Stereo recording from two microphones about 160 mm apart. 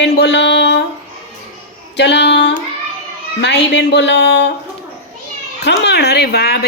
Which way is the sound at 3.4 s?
90° left.